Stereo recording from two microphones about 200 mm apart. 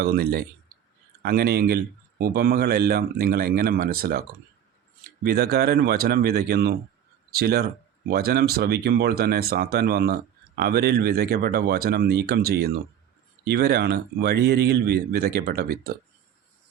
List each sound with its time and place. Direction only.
0.0 s speech: 50° right (ahead or behind)